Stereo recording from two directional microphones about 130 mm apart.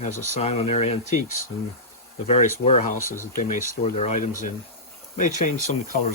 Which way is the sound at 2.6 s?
65° left (ahead or behind).